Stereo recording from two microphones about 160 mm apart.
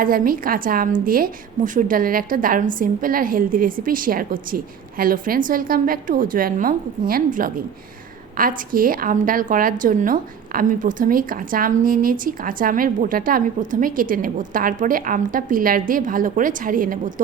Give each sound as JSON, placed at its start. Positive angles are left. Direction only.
{"t": 0.0, "sound": "a woman's voice", "side_deg": -60}